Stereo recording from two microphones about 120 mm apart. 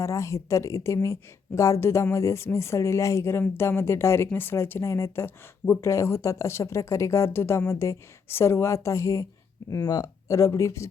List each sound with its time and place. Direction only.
0.0 s speech: 25° left (ahead or behind)